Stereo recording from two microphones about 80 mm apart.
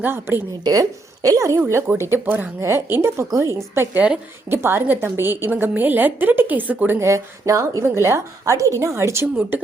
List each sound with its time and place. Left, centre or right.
0.0 s a woman's voice: right
0.6 s a woman's voice: right
2.6 s a woman's voice: right
3.9 s a woman's voice: centre
4.4 s a woman's voice: right
7.1 s a woman's voice: right